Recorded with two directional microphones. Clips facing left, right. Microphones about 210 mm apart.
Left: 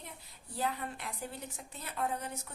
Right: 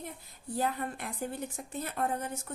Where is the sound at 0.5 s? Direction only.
50° right (ahead or behind).